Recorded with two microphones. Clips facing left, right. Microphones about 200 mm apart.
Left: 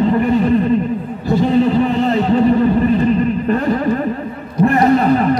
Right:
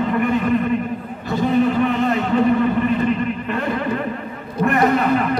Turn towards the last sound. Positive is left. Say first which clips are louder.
# left 5 dB
turn(degrees=35)  # may be behind; listen again after turning